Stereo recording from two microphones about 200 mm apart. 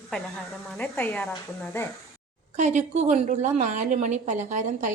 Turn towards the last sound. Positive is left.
turn(degrees=-40)  # may be behind; listen again after turning